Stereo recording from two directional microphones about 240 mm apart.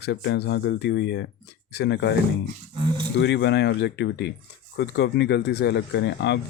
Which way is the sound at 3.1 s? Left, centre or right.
Left.